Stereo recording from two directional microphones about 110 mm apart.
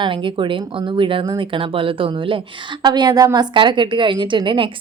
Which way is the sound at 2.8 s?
40° right (ahead or behind).